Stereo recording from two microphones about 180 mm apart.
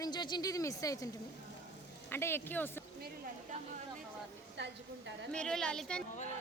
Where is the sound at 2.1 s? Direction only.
15° left (ahead or behind).